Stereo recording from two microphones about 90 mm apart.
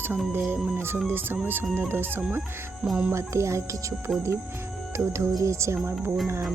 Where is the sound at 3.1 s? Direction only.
30° right (ahead or behind).